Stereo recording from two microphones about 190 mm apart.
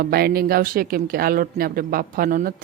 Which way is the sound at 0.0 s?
55° right (ahead or behind).